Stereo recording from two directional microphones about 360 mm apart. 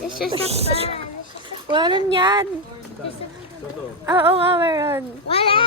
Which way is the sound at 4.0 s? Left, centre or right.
Centre.